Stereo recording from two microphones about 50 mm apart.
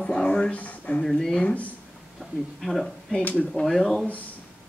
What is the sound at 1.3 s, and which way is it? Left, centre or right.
Speech, left.